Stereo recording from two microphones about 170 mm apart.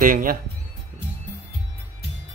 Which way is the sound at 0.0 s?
55° right (ahead or behind).